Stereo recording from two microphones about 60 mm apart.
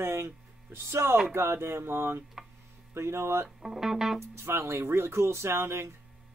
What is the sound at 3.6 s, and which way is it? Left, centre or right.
Speech, centre.